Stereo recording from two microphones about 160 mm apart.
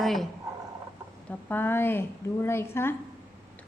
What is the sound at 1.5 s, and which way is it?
A woman's voice, 10° left (ahead or behind).